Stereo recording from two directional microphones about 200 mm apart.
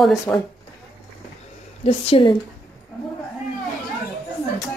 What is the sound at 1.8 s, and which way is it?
Speech, 25° left (ahead or behind).